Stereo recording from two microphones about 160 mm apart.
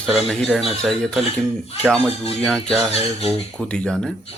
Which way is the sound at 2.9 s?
40° left (ahead or behind).